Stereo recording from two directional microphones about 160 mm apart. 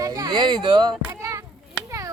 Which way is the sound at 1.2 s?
20° right (ahead or behind).